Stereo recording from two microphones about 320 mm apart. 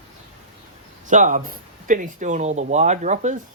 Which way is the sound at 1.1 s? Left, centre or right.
Right.